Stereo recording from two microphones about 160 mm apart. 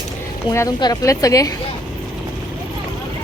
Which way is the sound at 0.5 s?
20° left (ahead or behind).